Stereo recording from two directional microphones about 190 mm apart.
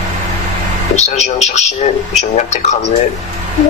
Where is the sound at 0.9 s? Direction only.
35° left (ahead or behind).